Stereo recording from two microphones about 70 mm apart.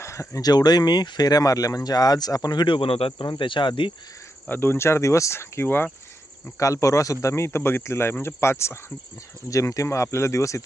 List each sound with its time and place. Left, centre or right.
0.0 s a sound: left
0.4 s speech: left
3.1 s speech: left
4.4 s speech: left
6.6 s speech: left
9.5 s speech: left